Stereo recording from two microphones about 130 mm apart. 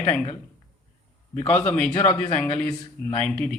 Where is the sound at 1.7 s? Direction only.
10° left (ahead or behind).